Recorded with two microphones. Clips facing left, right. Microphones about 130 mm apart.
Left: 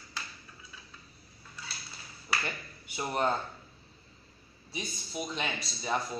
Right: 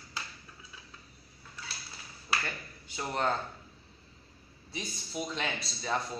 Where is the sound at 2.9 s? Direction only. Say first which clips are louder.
Left 1 dB; 15° left (ahead or behind).